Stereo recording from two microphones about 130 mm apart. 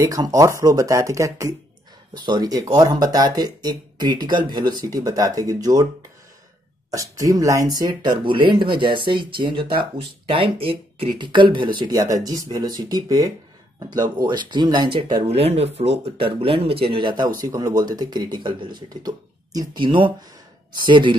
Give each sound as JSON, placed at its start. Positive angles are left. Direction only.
{"t": 0.0, "sound": "speech", "side_deg": -25}
{"t": 2.1, "sound": "speech", "side_deg": -35}
{"t": 6.9, "sound": "speech", "side_deg": -25}